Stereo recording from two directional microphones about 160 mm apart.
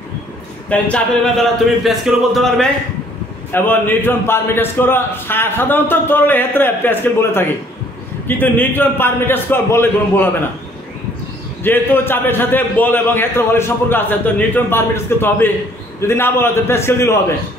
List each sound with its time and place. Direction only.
0.7 s speech: 10° left (ahead or behind)
3.5 s a man's voice: 10° left (ahead or behind)
11.6 s a man's voice: 10° left (ahead or behind)